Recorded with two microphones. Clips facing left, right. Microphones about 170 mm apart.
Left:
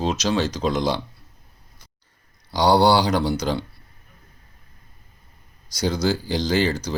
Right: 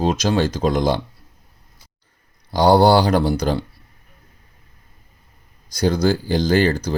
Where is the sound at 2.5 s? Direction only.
50° right (ahead or behind).